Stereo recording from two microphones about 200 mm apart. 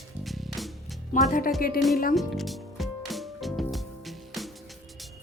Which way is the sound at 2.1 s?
Centre (ahead or behind).